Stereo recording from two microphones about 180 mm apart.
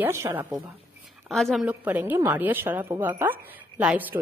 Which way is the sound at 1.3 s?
Centre (ahead or behind).